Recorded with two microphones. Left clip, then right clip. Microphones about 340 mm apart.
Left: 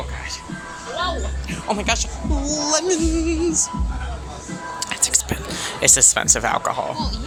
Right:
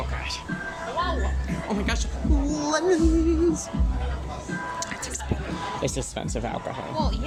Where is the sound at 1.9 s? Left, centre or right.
Centre.